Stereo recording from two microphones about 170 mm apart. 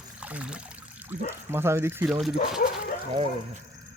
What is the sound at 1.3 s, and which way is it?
Speech, 15° right (ahead or behind).